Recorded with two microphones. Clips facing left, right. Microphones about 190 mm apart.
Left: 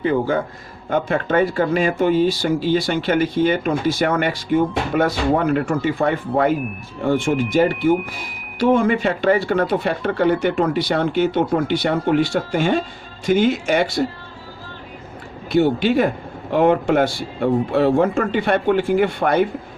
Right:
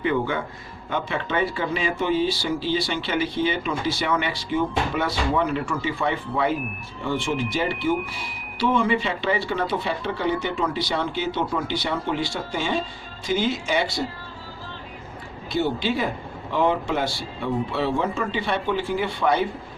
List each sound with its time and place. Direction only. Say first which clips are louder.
0.0 s a sound: left 5 dB; 40° left (ahead or behind)
0.9 s speech: left 7 dB; 45° left (ahead or behind)
15.5 s speech: left 8 dB; 55° left (ahead or behind)